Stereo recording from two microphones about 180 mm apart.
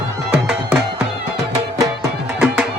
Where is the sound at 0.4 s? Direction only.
5° right (ahead or behind).